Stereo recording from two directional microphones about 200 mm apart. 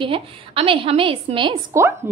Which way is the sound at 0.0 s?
25° right (ahead or behind).